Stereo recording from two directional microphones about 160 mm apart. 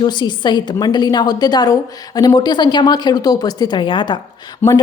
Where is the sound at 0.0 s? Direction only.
30° left (ahead or behind).